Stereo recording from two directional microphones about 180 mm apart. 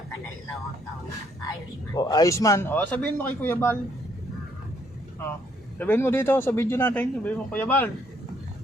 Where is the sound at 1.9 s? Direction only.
20° left (ahead or behind).